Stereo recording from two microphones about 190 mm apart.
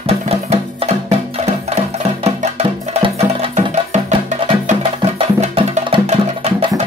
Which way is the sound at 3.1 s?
35° right (ahead or behind).